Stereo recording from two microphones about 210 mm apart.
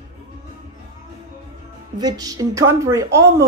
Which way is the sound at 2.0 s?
20° right (ahead or behind).